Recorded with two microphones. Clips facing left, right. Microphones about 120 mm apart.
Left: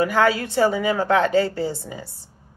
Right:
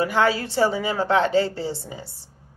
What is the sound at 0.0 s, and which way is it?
Speech, 25° right (ahead or behind).